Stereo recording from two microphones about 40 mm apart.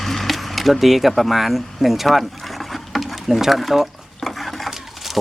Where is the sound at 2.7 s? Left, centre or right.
Centre.